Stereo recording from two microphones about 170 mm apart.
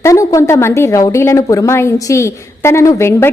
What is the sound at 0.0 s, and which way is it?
A woman's voice, 20° left (ahead or behind).